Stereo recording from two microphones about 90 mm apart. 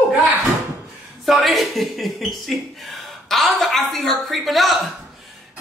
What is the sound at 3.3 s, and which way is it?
A man's voice, centre (ahead or behind).